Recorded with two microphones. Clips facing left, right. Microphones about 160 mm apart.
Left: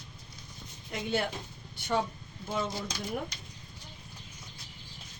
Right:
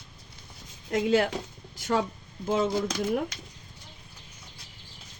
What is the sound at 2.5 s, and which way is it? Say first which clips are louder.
Speech: right 8 dB; 75° right (ahead or behind).